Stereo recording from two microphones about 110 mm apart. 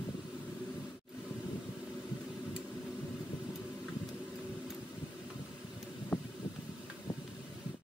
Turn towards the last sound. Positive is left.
turn(degrees=25)  # may be behind; listen again after turning